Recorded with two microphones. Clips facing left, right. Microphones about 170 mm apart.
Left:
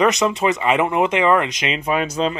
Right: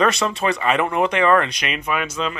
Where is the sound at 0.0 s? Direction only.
20° left (ahead or behind).